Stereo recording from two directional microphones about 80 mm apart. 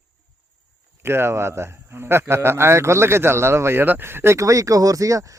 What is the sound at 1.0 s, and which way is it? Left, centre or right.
A man's voice, right.